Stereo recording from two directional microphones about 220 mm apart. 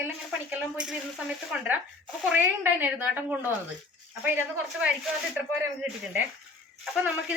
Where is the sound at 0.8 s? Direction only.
5° right (ahead or behind).